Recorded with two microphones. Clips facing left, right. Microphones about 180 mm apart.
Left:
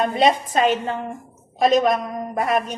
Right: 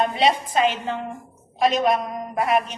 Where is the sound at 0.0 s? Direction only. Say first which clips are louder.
Left 2 dB; 45° left (ahead or behind).